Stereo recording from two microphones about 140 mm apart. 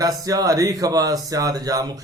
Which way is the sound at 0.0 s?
25° right (ahead or behind).